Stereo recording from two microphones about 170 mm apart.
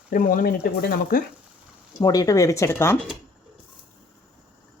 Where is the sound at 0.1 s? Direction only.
55° left (ahead or behind).